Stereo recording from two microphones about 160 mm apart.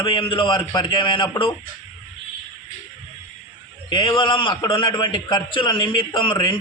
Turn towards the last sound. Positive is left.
turn(degrees=30)  # may be behind; listen again after turning